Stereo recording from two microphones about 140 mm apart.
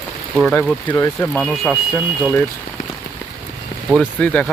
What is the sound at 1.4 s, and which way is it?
Speech, centre (ahead or behind).